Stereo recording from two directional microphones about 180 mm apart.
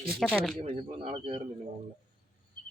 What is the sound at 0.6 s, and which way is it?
Speech, 35° right (ahead or behind).